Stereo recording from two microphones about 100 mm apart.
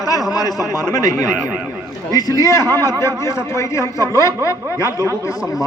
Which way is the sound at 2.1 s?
35° left (ahead or behind).